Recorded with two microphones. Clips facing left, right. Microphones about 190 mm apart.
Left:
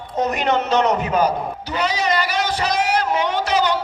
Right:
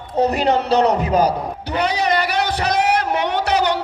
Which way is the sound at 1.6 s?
60° right (ahead or behind).